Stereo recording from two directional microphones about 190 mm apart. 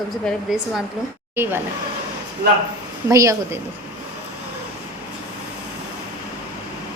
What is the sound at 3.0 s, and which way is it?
Speech, 15° right (ahead or behind).